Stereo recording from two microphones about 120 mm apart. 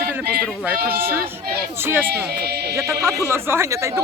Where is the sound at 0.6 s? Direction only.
15° right (ahead or behind).